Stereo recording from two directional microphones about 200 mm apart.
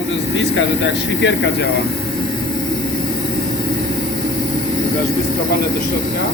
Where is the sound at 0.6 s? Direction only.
65° left (ahead or behind).